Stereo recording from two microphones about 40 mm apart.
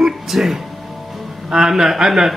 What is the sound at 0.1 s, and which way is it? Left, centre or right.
Music, centre.